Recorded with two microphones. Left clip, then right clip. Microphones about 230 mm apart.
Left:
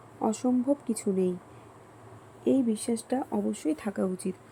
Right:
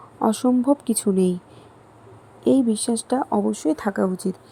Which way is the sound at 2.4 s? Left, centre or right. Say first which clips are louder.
Right 7 dB; right.